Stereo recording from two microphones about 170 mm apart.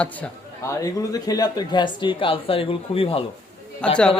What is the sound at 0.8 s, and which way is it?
Speech, 20° left (ahead or behind).